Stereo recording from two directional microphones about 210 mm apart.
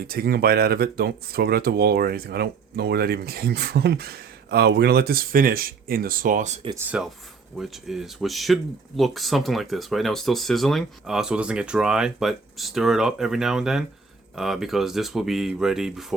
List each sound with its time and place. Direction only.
0.1 s speech: 45° right (ahead or behind)
6.9 s speech: 5° right (ahead or behind)